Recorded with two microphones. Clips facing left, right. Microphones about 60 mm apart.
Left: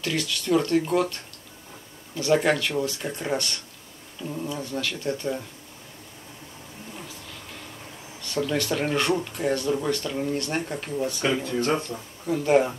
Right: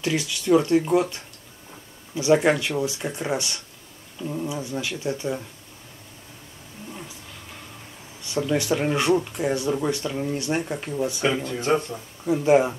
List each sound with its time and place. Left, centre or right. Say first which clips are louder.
0.0 s speech: right 2 dB; centre
2.1 s speech: right 3 dB; centre
8.2 s speech: right 2 dB; centre
11.3 s speech: left 1 dB; centre
11.7 s speech: right 4 dB; centre